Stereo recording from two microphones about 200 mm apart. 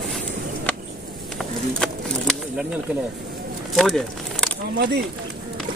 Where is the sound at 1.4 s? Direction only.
5° left (ahead or behind).